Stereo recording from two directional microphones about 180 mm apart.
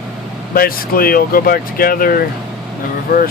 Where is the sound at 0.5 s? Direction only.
55° left (ahead or behind).